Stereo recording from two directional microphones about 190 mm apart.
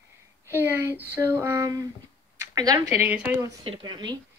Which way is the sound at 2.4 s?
20° right (ahead or behind).